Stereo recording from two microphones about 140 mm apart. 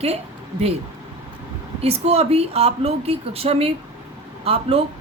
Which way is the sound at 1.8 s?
45° right (ahead or behind).